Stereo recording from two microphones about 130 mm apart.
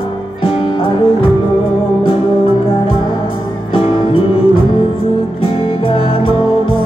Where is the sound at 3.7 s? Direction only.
45° left (ahead or behind).